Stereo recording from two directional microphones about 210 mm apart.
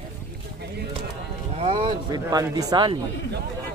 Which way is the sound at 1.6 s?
25° right (ahead or behind).